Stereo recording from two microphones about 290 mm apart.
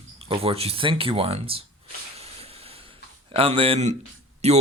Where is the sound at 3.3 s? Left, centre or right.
Centre.